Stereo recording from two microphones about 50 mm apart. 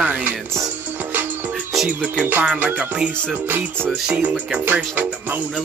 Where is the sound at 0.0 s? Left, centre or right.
Right.